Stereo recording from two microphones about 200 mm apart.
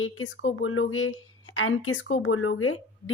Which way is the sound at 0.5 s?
90° left.